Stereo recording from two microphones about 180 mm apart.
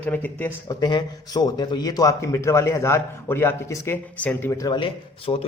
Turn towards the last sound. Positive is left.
turn(degrees=25)  # may be behind; listen again after turning